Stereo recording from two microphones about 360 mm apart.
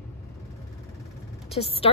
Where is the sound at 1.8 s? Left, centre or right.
Centre.